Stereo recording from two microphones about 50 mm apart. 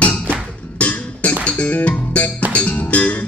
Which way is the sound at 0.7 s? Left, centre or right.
Left.